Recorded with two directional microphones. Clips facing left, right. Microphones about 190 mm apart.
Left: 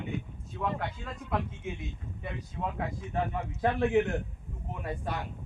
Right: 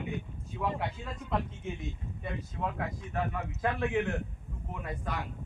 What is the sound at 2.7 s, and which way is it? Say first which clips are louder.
A man's voice: left 2 dB; 25° left (ahead or behind).